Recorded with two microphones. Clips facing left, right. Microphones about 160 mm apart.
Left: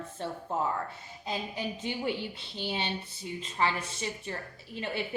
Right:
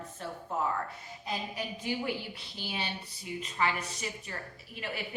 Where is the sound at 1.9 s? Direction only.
25° left (ahead or behind).